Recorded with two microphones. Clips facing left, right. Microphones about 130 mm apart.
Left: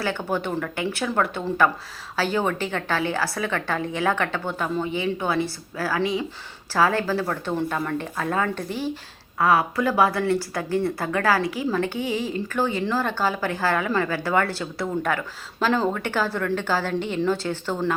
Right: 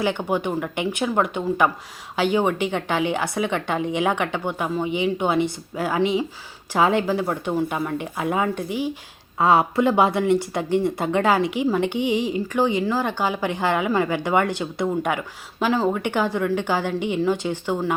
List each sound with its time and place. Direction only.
0.0 s speech: 15° right (ahead or behind)
9.4 s speech: 25° right (ahead or behind)